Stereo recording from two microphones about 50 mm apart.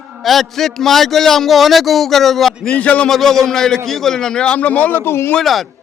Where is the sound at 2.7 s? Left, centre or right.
Left.